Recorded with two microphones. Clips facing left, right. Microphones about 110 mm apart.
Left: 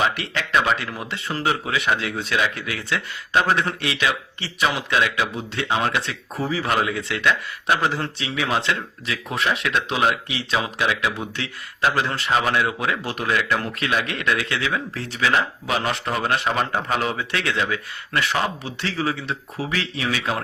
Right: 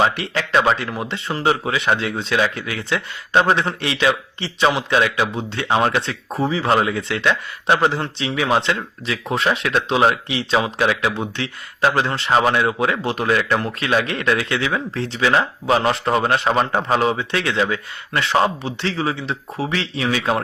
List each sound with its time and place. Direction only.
0.0 s speech: 35° right (ahead or behind)
1.6 s speech: 35° right (ahead or behind)